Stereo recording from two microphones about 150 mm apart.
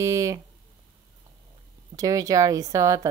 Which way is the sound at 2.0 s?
25° right (ahead or behind).